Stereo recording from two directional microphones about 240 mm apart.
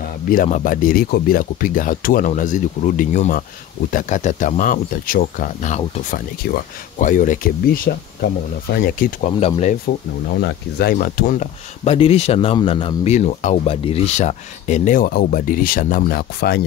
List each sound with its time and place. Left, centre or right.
0.3 s speech: left
10.4 s speech: left